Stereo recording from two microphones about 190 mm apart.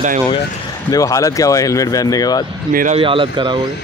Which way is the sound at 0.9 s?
15° left (ahead or behind).